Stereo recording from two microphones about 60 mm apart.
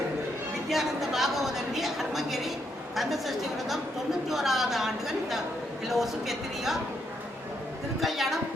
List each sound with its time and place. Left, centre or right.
0.7 s a woman's voice: centre
7.9 s a woman's voice: centre